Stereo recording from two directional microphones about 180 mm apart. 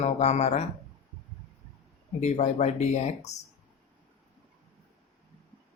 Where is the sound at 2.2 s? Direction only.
40° left (ahead or behind).